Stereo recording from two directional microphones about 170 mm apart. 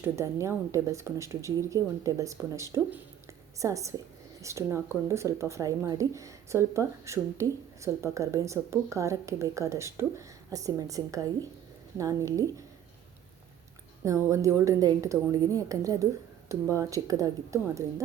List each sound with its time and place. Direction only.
0.0 s a woman's voice: 15° right (ahead or behind)
14.0 s a woman's voice: 20° right (ahead or behind)